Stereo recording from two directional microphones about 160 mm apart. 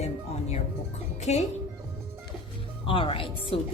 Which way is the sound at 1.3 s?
45° left (ahead or behind).